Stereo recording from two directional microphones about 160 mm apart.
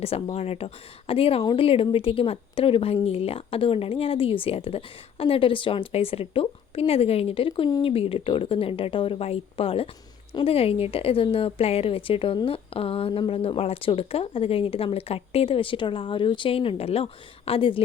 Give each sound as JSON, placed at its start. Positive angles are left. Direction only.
{"t": 0.0, "sound": "a woman's voice", "side_deg": 40}